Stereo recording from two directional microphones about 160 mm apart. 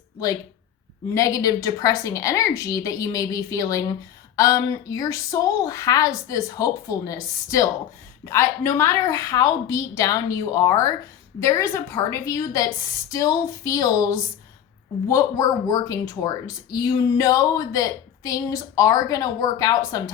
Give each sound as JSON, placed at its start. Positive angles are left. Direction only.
{"t": 1.1, "sound": "speech", "side_deg": 20}